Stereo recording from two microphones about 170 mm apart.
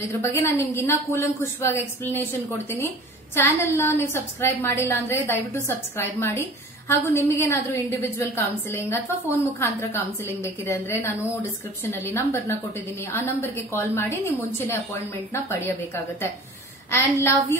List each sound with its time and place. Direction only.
0.2 s a woman's voice: 15° left (ahead or behind)
3.3 s a woman's voice: 15° left (ahead or behind)